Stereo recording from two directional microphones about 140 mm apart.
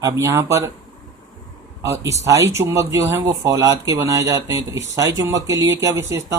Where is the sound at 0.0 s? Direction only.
20° right (ahead or behind).